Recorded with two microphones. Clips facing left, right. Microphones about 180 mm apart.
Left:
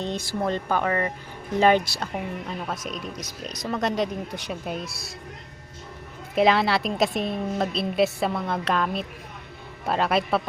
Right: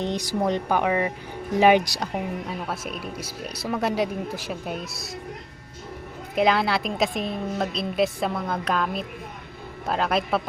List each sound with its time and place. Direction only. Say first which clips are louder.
0.0 s a woman's voice: right 2 dB; 15° right (ahead or behind)
6.3 s a woman's voice: left 1 dB; centre (ahead or behind)